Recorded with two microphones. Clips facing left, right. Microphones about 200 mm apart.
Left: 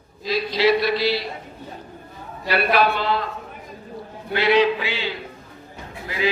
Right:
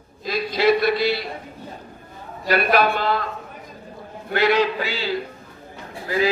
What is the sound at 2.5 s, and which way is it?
Speech, 45° right (ahead or behind).